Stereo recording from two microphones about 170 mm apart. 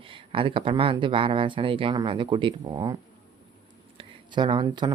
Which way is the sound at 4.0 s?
25° right (ahead or behind).